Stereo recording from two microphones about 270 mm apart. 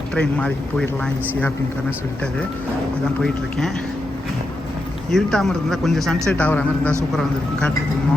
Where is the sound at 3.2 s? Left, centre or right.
Centre.